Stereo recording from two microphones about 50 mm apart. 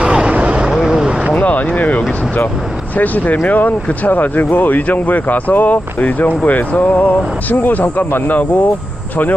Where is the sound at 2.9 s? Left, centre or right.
Left.